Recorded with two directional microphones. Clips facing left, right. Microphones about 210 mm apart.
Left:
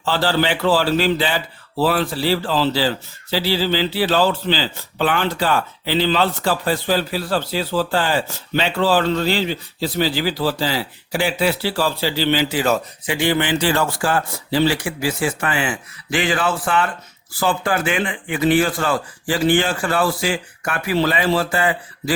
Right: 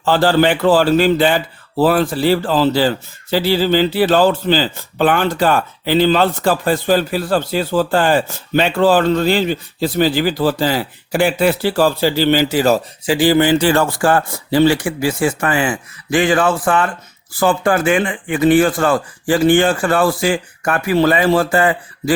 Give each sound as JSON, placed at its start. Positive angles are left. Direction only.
{"t": 0.0, "sound": "a man's voice", "side_deg": -50}